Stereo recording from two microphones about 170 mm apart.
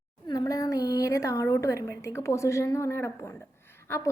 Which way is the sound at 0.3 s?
20° left (ahead or behind).